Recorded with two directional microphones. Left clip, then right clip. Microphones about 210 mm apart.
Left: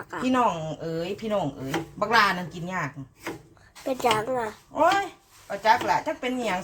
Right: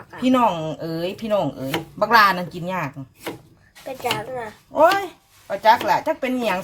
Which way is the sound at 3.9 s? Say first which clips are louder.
Left 2 dB; 35° left (ahead or behind).